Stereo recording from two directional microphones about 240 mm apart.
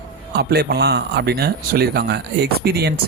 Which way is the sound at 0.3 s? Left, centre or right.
Right.